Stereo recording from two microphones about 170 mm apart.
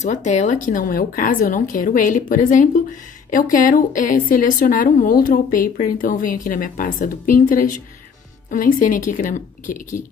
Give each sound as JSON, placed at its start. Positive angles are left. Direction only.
{"t": 0.0, "sound": "a woman's voice", "side_deg": 45}